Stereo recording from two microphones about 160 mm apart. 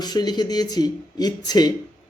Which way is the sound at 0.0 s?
25° left (ahead or behind).